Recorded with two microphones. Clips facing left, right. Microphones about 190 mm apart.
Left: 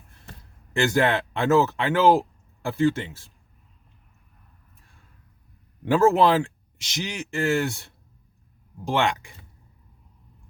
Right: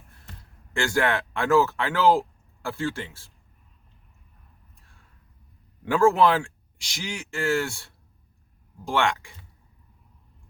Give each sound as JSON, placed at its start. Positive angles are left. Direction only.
{"t": 0.7, "sound": "speech", "side_deg": 20}
{"t": 5.8, "sound": "speech", "side_deg": 25}